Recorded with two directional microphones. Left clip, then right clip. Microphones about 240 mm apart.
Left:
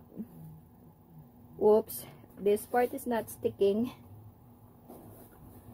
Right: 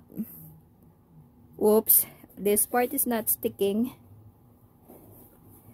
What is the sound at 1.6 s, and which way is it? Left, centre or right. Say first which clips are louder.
A woman's voice: right 2 dB; right.